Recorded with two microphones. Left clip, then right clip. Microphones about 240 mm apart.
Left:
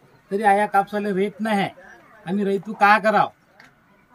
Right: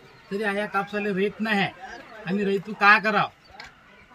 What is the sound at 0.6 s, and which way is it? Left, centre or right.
Speech, left.